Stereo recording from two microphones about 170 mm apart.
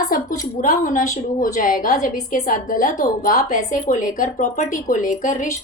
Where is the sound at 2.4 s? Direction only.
55° left (ahead or behind).